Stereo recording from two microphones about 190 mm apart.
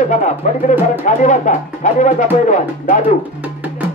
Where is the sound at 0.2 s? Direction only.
40° left (ahead or behind).